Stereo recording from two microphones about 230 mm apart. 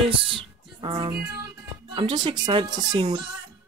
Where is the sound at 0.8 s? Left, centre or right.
Centre.